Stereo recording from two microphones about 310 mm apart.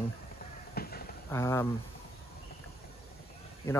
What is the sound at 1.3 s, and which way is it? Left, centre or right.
Speech, centre.